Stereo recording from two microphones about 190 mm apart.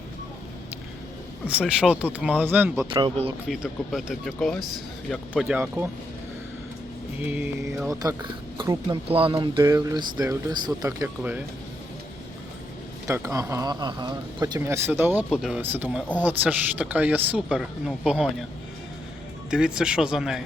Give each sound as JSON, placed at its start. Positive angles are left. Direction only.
{"t": 1.5, "sound": "speech", "side_deg": -5}
{"t": 2.9, "sound": "speech", "side_deg": -25}
{"t": 3.5, "sound": "speech", "side_deg": 0}
{"t": 7.3, "sound": "speech", "side_deg": -10}
{"t": 13.1, "sound": "speech", "side_deg": -15}
{"t": 19.5, "sound": "speech", "side_deg": -5}